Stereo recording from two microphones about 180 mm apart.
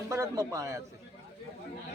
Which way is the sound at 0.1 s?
15° right (ahead or behind).